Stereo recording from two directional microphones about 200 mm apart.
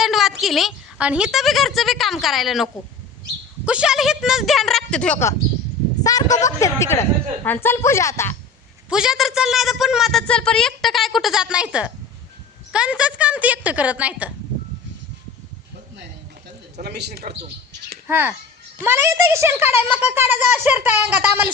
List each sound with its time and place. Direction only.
0.0 s a woman's voice: centre (ahead or behind)
3.7 s a woman's voice: 5° right (ahead or behind)
6.0 s a woman's voice: 20° left (ahead or behind)
8.9 s a woman's voice: 5° right (ahead or behind)
16.8 s speech: 55° right (ahead or behind)
18.1 s speech: 10° right (ahead or behind)